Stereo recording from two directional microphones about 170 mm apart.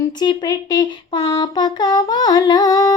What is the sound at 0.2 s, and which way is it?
Speech, 25° left (ahead or behind).